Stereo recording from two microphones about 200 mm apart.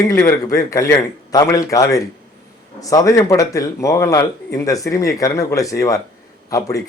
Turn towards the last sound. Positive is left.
turn(degrees=15)  # may be behind; listen again after turning